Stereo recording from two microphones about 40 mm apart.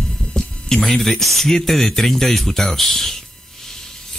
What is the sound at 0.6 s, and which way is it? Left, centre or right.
Speech, centre.